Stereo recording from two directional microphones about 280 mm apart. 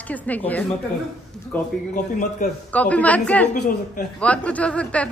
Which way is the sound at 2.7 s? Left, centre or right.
Centre.